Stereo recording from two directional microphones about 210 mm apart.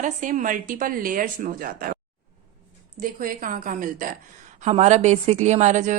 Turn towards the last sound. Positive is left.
turn(degrees=-35)  # may be behind; listen again after turning